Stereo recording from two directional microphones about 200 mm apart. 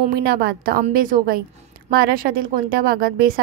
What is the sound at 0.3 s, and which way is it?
Speech, 50° right (ahead or behind).